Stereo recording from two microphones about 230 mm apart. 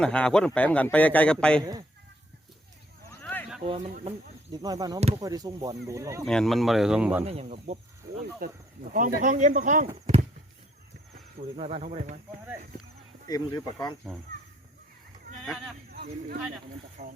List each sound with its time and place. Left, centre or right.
0.0 s a man's voice: centre
3.1 s a sound: centre
3.6 s speech: right
4.5 s speech: centre
4.9 s speech: right
5.2 s speech: centre
6.2 s a man's voice: centre
7.3 s speech: right
8.4 s speech: right
11.3 s speech: right
13.2 s speech: centre
15.4 s a man's voice: centre
15.9 s speech: right
17.0 s speech: right